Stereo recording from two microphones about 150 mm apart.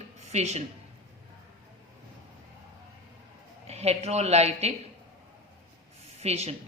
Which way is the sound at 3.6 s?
45° right (ahead or behind).